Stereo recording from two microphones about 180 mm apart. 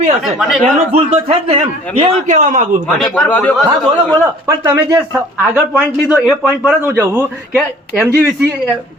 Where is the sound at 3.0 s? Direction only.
5° left (ahead or behind).